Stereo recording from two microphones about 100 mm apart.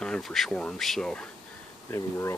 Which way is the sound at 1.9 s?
30° left (ahead or behind).